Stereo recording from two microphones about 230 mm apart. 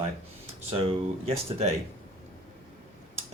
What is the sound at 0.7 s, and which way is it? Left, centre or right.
Speech, right.